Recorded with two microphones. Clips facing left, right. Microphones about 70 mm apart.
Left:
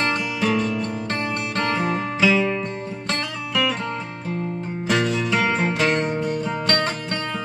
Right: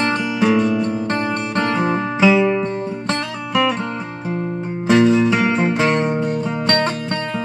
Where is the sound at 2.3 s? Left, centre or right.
Centre.